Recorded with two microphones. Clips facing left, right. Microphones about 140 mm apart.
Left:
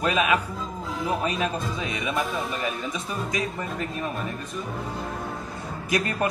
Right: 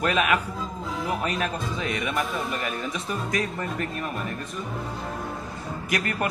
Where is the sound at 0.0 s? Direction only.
20° left (ahead or behind).